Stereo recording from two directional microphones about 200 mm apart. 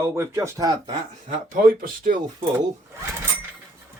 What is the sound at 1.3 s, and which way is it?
Speech, 45° right (ahead or behind).